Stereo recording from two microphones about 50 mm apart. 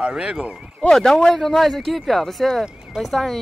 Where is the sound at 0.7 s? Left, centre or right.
Centre.